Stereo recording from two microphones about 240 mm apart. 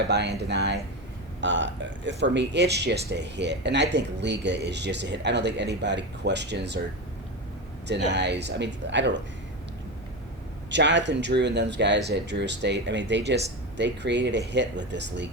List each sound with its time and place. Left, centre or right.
0.1 s speech: right
7.9 s speech: right
10.7 s speech: right